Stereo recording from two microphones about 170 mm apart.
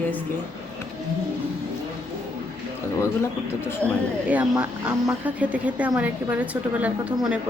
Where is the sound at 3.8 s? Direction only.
10° left (ahead or behind).